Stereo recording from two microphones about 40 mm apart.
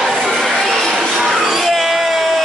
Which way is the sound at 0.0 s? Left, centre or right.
Centre.